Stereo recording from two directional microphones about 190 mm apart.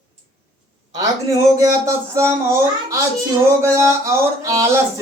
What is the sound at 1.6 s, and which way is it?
Speech, 15° right (ahead or behind).